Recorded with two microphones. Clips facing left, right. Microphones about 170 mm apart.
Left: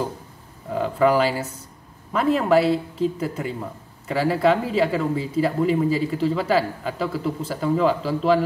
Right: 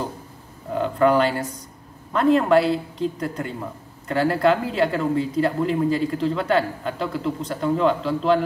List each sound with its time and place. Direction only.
0.7 s speech: 5° left (ahead or behind)